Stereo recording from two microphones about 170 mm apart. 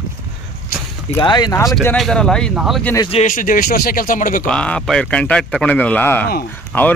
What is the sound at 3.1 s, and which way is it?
A man's voice, 50° left (ahead or behind).